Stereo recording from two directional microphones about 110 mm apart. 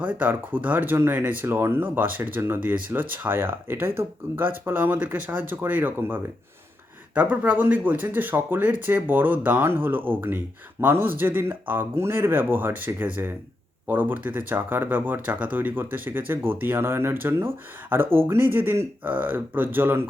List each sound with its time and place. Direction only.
0.0 s speech: 15° right (ahead or behind)